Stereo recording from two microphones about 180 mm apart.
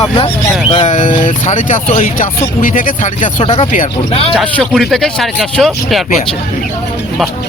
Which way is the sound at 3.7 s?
45° left (ahead or behind).